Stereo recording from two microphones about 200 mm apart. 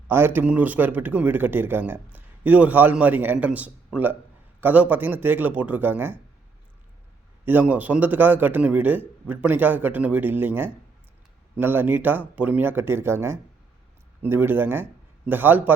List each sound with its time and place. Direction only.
0.1 s a man's voice: 10° right (ahead or behind)
7.4 s a man's voice: 10° right (ahead or behind)